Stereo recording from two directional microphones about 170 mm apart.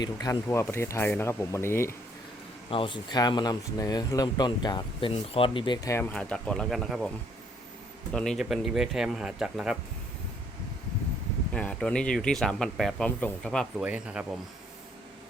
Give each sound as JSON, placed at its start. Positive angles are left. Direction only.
{"t": 0.0, "sound": "speech", "side_deg": 25}
{"t": 2.6, "sound": "speech", "side_deg": 30}
{"t": 8.1, "sound": "speech", "side_deg": 5}
{"t": 11.5, "sound": "speech", "side_deg": 5}
{"t": 13.8, "sound": "speech", "side_deg": -5}